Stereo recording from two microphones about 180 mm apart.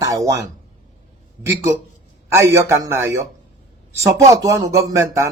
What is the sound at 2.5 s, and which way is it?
Speech, 15° right (ahead or behind).